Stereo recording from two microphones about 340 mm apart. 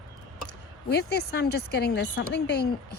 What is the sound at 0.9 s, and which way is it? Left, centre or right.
Speech, left.